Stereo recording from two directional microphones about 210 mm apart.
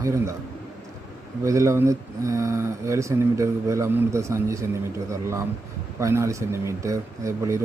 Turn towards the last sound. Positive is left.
turn(degrees=-15)  # may be behind; listen again after turning